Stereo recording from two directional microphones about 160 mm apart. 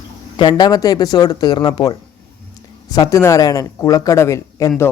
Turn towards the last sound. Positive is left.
turn(degrees=20)  # may be behind; listen again after turning